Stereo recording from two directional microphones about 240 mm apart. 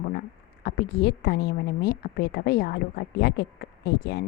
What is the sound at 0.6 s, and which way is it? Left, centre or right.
A woman's voice, left.